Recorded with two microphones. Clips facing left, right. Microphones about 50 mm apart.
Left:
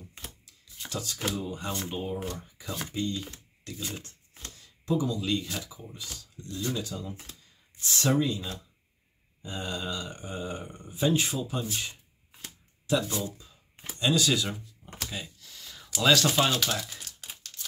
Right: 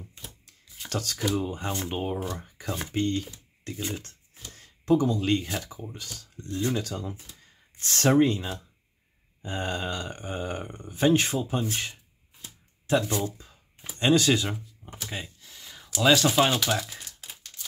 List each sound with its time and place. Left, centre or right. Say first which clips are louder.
0.8 s speech: right 4 dB; right
1.4 s speech: right 3 dB; right
1.9 s speech: right 3 dB; right
3.6 s speech: right 4 dB; right
4.6 s speech: right 6 dB; right
6.4 s speech: right 4 dB; right
6.9 s speech: right 3 dB; right
15.4 s a sound: right 1 dB; centre
16.1 s speech: right 2 dB; centre
17.2 s typewriter: even; centre